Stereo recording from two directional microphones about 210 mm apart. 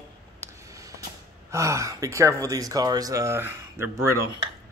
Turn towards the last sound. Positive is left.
turn(degrees=-15)  # may be behind; listen again after turning